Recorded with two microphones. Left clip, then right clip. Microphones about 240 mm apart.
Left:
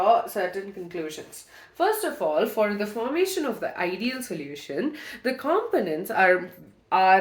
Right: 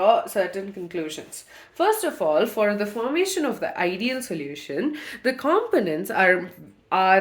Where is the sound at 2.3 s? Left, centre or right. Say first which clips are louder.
Right 3 dB; right.